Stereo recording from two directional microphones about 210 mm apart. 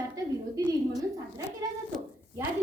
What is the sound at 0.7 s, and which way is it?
Speech, 15° right (ahead or behind).